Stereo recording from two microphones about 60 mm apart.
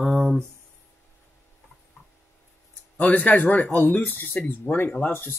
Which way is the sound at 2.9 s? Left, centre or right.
Left.